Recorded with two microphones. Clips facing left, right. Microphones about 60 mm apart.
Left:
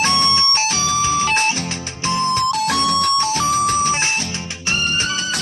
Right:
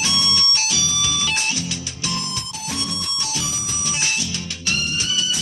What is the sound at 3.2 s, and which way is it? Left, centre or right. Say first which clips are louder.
Music: left 12 dB; left.